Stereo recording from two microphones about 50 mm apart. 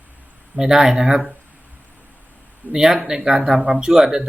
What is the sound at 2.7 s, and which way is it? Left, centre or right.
Speech, centre.